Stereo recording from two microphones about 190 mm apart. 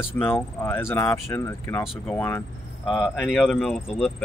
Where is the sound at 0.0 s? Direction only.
10° left (ahead or behind).